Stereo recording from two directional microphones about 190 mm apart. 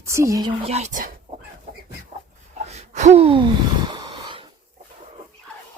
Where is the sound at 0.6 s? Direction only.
35° right (ahead or behind).